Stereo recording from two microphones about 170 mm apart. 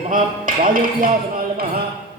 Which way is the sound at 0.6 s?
55° right (ahead or behind).